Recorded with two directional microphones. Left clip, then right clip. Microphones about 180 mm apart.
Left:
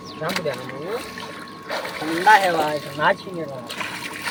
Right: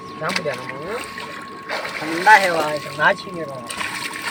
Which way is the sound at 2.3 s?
5° left (ahead or behind).